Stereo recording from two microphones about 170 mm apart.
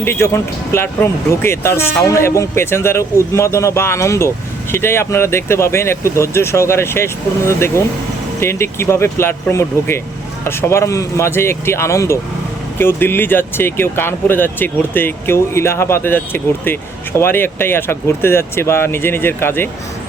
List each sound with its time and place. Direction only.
0.0 s speech: 15° left (ahead or behind)